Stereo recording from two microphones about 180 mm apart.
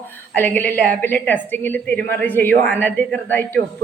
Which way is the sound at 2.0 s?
60° right (ahead or behind).